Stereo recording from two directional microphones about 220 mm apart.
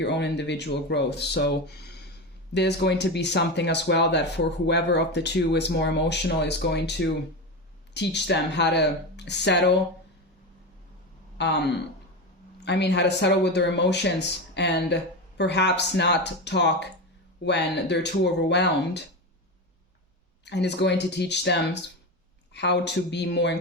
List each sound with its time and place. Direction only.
0.0 s speech: 50° left (ahead or behind)
11.3 s speech: 50° left (ahead or behind)
20.4 s speech: 50° left (ahead or behind)